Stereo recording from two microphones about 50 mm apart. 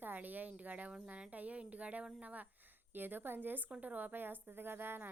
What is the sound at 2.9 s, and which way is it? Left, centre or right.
Speech, right.